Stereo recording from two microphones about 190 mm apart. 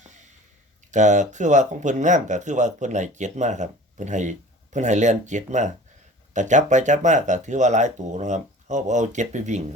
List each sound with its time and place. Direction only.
0.9 s speech: 40° right (ahead or behind)